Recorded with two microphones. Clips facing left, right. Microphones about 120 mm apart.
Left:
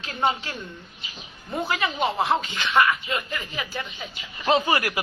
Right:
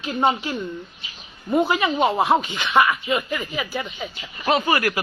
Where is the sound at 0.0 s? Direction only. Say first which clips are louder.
Right 4 dB; 20° right (ahead or behind).